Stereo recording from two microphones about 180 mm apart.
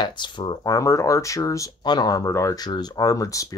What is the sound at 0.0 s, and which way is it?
Speech, 25° left (ahead or behind).